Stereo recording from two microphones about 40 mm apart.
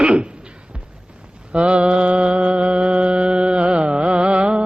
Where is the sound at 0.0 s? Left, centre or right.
Right.